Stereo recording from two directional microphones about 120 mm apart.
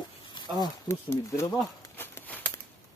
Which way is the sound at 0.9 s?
20° left (ahead or behind).